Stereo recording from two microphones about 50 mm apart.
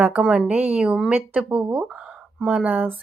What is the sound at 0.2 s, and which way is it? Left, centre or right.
Speech, right.